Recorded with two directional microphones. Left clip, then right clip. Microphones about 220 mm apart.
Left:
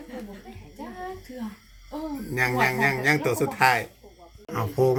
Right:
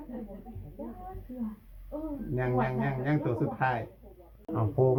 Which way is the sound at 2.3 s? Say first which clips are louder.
Left 8 dB; 20° left (ahead or behind).